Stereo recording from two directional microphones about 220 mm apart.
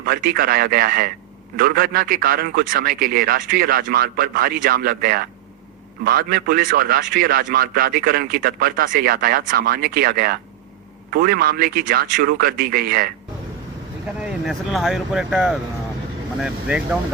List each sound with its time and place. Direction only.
0.0 s a man's voice: 40° right (ahead or behind)
14.2 s speech: centre (ahead or behind)